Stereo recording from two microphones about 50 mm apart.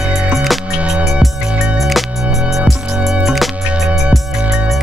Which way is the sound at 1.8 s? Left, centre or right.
Centre.